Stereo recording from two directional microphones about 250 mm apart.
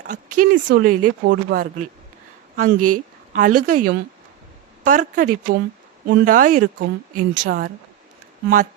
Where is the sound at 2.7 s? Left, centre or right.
Right.